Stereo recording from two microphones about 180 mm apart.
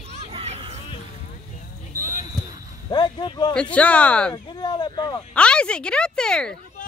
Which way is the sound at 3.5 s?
5° left (ahead or behind).